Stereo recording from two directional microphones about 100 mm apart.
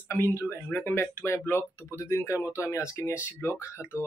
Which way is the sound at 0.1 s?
25° left (ahead or behind).